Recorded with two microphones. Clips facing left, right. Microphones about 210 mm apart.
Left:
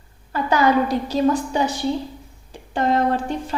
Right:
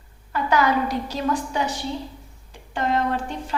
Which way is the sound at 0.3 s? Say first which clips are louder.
Left 3 dB; 30° left (ahead or behind).